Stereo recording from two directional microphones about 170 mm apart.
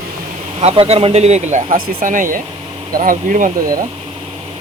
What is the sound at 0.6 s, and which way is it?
Speech, 35° right (ahead or behind).